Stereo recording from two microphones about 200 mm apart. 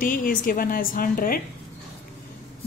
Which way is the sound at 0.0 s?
45° left (ahead or behind).